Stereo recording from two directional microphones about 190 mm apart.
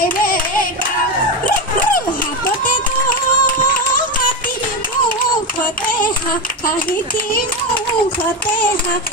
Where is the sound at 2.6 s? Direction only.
45° left (ahead or behind).